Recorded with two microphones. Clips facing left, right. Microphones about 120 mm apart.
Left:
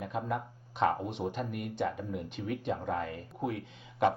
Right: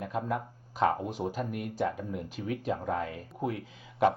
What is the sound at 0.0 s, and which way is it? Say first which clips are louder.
Speech: right 2 dB; centre (ahead or behind).